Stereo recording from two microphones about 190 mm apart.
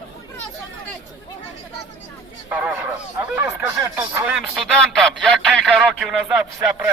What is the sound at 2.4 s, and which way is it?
A man's voice, 5° right (ahead or behind).